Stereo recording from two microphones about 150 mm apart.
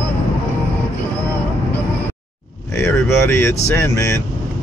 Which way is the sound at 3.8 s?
20° left (ahead or behind).